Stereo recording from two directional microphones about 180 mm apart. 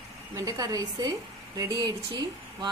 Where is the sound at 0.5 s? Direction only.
20° right (ahead or behind).